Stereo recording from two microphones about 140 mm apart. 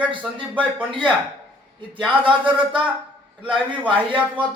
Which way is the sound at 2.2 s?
35° right (ahead or behind).